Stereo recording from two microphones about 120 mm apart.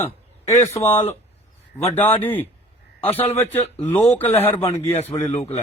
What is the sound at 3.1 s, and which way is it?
Speech, 55° left (ahead or behind).